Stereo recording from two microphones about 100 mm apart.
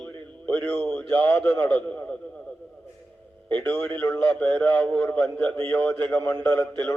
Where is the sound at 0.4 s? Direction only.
15° left (ahead or behind).